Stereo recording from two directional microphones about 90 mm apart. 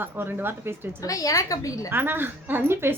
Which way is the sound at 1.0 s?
40° left (ahead or behind).